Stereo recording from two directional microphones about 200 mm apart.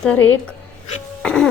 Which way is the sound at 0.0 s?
5° left (ahead or behind).